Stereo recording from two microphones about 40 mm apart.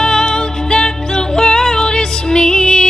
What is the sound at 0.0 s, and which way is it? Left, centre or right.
Music, left.